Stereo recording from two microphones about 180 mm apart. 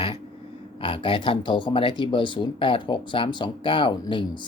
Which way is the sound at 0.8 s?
30° left (ahead or behind).